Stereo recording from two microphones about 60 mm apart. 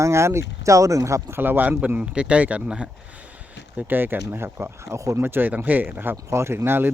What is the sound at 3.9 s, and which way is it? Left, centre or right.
Speech, right.